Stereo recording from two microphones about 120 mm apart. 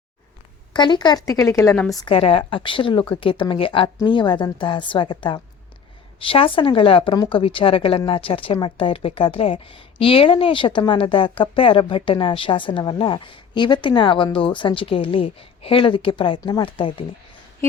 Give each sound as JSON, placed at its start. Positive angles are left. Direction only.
{"t": 0.7, "sound": "a woman's voice", "side_deg": 40}
{"t": 2.0, "sound": "a woman's voice", "side_deg": 50}